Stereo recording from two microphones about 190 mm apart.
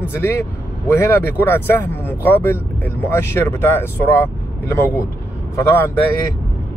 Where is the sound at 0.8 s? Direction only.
10° left (ahead or behind).